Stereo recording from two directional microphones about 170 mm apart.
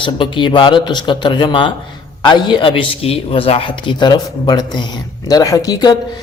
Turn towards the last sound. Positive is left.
turn(degrees=25)  # may be behind; listen again after turning